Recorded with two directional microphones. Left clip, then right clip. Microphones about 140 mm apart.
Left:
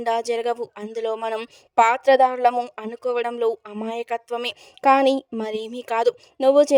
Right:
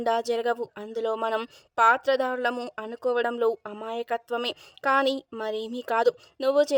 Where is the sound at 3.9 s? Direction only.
45° left (ahead or behind).